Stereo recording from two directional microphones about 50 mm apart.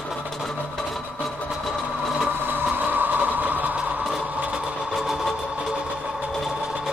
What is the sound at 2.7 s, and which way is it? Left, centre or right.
Train, right.